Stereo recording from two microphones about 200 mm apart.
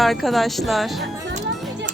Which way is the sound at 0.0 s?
Centre (ahead or behind).